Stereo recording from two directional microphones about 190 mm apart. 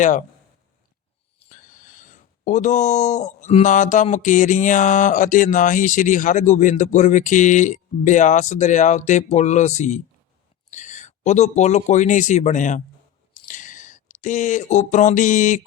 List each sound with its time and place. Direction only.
1.5 s speech: 45° left (ahead or behind)